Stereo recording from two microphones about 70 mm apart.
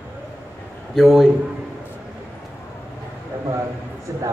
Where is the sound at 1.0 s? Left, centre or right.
Centre.